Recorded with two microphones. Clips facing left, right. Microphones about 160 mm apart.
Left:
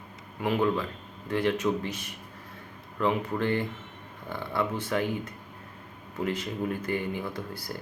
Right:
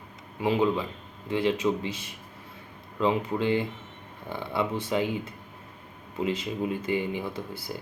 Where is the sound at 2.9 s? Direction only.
15° right (ahead or behind).